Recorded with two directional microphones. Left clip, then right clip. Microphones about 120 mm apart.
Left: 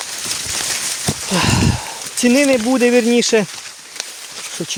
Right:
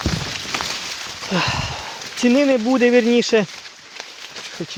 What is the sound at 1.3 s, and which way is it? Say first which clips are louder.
Speech: left 3 dB; 30° left (ahead or behind).